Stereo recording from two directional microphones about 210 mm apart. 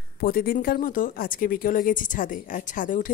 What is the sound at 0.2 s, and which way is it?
Speech, 45° left (ahead or behind).